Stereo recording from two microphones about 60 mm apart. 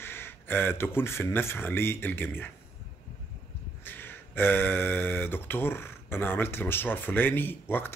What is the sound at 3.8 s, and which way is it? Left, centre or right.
Speech, left.